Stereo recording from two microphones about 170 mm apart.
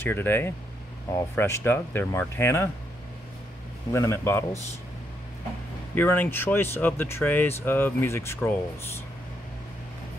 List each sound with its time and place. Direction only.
0.0 s speech: 10° left (ahead or behind)
3.9 s speech: 15° left (ahead or behind)
5.9 s speech: 10° left (ahead or behind)